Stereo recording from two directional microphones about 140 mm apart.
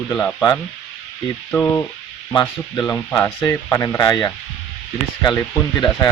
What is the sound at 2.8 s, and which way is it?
Speech, 10° left (ahead or behind).